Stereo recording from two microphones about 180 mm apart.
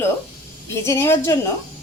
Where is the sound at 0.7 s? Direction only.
15° left (ahead or behind).